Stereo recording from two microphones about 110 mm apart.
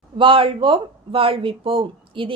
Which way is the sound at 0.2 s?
50° right (ahead or behind).